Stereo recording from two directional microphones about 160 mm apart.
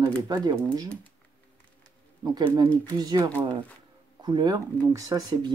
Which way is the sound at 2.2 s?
25° right (ahead or behind).